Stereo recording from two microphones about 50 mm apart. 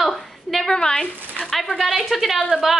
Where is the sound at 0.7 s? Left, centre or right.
Centre.